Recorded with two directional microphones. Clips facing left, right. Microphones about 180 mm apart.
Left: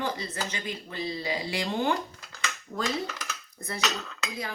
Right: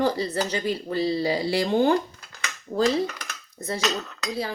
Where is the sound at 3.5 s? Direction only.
30° right (ahead or behind).